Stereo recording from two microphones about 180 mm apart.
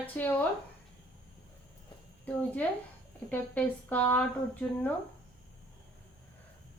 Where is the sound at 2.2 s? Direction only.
10° left (ahead or behind).